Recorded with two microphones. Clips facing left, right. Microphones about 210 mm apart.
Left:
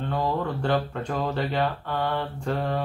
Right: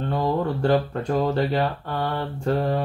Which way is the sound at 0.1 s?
40° right (ahead or behind).